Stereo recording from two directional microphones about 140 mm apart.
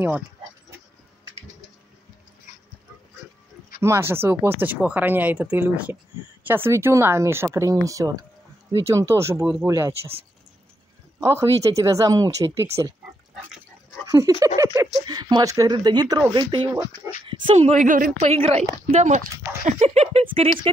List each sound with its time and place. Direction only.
3.8 s speech: 20° right (ahead or behind)
9.4 s speech: 5° right (ahead or behind)
9.7 s speech: 25° right (ahead or behind)
11.1 s speech: 25° right (ahead or behind)
14.0 s a sound: 25° right (ahead or behind)
14.4 s speech: 25° right (ahead or behind)
17.6 s speech: 55° right (ahead or behind)